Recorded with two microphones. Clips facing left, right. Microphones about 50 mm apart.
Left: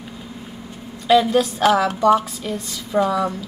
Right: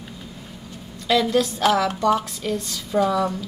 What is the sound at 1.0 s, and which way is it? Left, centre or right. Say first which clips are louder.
A woman's voice: left 4 dB; centre.